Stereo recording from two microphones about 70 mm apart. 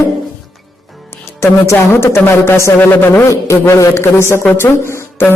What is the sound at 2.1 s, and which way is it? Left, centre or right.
A man's voice, left.